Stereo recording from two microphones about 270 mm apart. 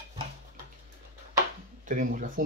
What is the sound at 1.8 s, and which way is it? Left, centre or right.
Speech, right.